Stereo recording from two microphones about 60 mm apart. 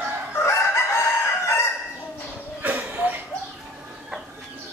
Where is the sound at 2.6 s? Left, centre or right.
Right.